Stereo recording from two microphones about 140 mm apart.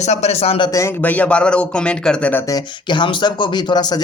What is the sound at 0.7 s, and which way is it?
Speech, 15° left (ahead or behind).